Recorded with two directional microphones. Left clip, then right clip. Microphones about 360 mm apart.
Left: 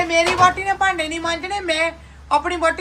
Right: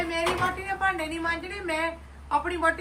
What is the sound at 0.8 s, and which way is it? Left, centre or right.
Speech, centre.